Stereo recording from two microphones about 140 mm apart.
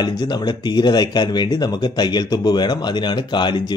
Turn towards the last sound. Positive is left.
turn(degrees=35)  # may be behind; listen again after turning